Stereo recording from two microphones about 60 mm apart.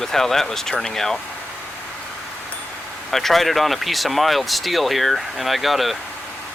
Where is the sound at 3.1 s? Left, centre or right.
Centre.